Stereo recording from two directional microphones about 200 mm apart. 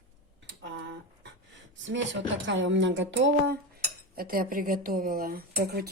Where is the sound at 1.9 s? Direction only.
65° right (ahead or behind).